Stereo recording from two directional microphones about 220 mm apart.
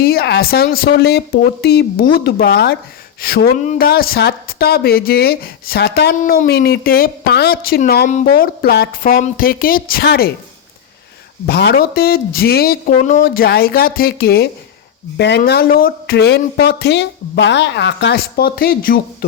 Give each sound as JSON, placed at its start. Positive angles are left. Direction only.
{"t": 0.0, "sound": "speech", "side_deg": 45}
{"t": 11.4, "sound": "speech", "side_deg": 50}